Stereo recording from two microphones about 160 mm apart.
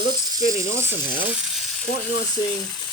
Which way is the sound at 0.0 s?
25° right (ahead or behind).